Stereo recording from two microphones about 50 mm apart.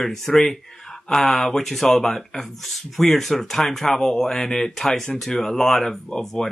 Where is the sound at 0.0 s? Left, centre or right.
Centre.